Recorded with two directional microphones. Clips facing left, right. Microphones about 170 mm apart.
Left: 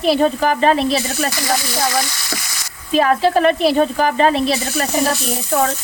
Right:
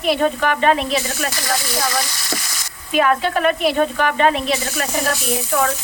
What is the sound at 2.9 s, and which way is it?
Speech, 30° left (ahead or behind).